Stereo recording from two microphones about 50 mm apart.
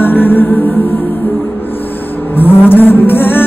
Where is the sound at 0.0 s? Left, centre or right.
Left.